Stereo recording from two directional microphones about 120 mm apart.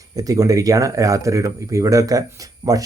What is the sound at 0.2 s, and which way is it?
Speech, 30° right (ahead or behind).